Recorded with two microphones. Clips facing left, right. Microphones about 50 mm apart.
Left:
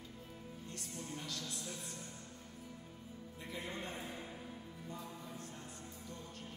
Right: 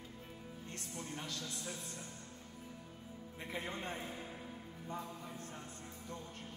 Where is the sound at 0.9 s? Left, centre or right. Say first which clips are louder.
Right 1 dB; right.